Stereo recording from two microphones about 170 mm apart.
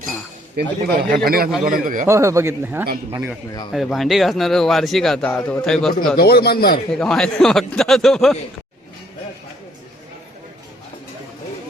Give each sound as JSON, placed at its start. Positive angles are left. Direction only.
{"t": 0.5, "sound": "speech", "side_deg": -65}
{"t": 2.0, "sound": "a man's voice", "side_deg": -15}
{"t": 3.7, "sound": "speech", "side_deg": 0}
{"t": 6.1, "sound": "speech", "side_deg": 70}
{"t": 6.9, "sound": "speech", "side_deg": 5}